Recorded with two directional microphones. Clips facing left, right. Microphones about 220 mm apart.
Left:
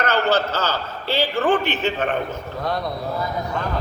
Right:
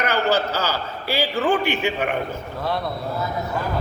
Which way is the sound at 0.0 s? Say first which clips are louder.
Left 1 dB; 15° right (ahead or behind).